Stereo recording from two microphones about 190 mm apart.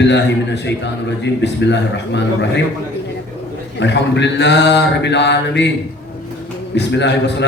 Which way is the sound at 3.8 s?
65° left (ahead or behind).